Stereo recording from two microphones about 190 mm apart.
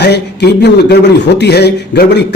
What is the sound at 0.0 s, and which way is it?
A man's voice, 60° left (ahead or behind).